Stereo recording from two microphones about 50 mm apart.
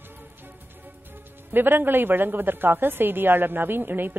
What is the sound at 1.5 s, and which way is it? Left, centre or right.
A woman's voice, right.